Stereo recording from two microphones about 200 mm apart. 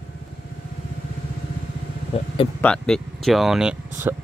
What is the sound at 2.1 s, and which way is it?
Vehicle, 30° left (ahead or behind).